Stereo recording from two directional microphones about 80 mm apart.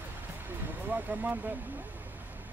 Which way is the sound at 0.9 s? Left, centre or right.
Right.